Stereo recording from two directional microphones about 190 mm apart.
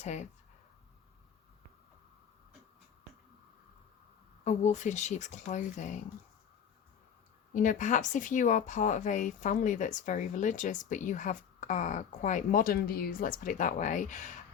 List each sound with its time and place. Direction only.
0.0 s speech: 35° left (ahead or behind)
4.4 s speech: 40° left (ahead or behind)
7.5 s speech: 45° left (ahead or behind)